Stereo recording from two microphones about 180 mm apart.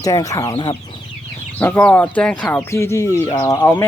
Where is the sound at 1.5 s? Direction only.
10° left (ahead or behind).